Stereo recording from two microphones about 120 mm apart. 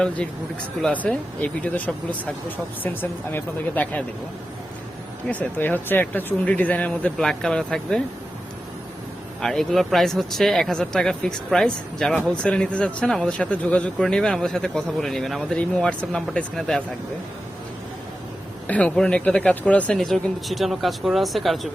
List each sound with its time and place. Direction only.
0.8 s speech: 5° left (ahead or behind)
5.3 s speech: 15° left (ahead or behind)
9.4 s speech: 5° left (ahead or behind)
18.7 s speech: 10° left (ahead or behind)